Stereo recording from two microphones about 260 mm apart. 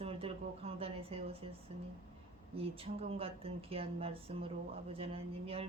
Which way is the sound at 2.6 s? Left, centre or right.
Right.